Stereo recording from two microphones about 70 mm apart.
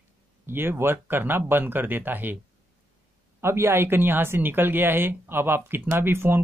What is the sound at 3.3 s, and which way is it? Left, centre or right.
Speech, right.